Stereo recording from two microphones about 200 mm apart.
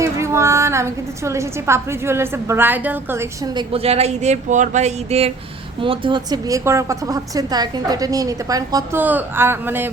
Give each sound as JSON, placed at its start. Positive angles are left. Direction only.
{"t": 0.0, "sound": "a woman's voice", "side_deg": -15}